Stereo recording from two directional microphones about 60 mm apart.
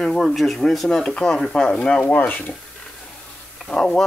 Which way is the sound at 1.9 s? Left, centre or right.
Left.